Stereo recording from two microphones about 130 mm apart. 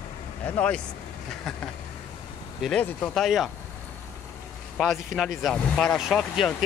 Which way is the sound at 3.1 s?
Centre (ahead or behind).